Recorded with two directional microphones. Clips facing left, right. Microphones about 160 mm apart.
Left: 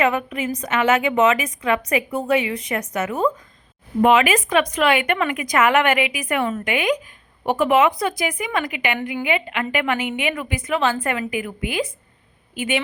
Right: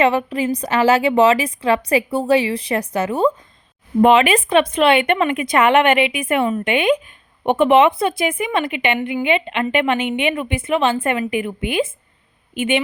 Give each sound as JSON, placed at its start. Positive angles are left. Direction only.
{"t": 0.0, "sound": "a woman's voice", "side_deg": -30}